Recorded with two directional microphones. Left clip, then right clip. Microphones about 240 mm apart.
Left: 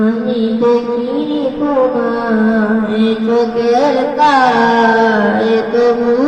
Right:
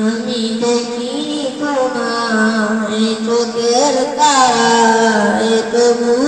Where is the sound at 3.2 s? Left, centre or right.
Right.